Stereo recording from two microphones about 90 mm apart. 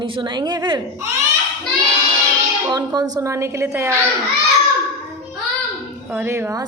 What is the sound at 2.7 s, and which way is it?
A woman's voice, 45° right (ahead or behind).